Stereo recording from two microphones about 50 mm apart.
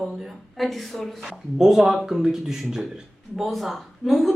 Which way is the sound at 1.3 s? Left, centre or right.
Centre.